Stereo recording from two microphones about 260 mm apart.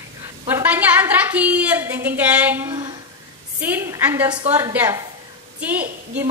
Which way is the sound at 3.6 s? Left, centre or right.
Centre.